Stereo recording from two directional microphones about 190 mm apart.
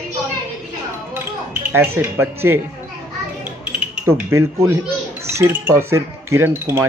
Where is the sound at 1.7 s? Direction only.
10° right (ahead or behind).